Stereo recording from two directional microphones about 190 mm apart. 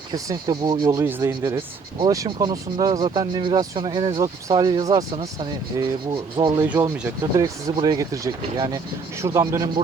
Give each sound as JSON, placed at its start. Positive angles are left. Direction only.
{"t": 0.1, "sound": "speech", "side_deg": -20}
{"t": 6.7, "sound": "speech", "side_deg": -10}